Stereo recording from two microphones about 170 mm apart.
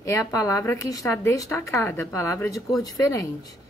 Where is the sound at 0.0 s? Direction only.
20° left (ahead or behind).